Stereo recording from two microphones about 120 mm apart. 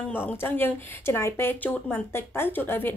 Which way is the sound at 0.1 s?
15° left (ahead or behind).